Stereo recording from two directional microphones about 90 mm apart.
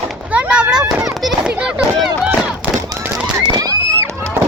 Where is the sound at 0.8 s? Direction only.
40° right (ahead or behind).